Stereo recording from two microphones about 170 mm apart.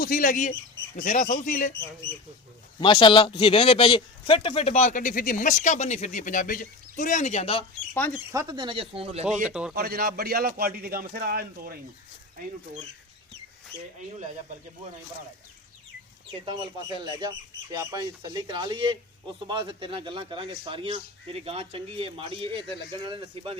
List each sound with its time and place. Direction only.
0.0 s speech: 55° left (ahead or behind)
2.8 s speech: 30° left (ahead or behind)
8.3 s speech: 20° right (ahead or behind)
9.2 s speech: 5° right (ahead or behind)
9.7 s a man's voice: 60° right (ahead or behind)
16.5 s speech: 30° right (ahead or behind)